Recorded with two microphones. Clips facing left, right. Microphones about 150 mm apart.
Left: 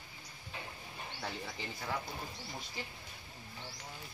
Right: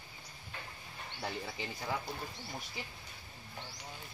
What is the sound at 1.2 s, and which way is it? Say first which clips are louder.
Speech: right 3 dB; 10° right (ahead or behind).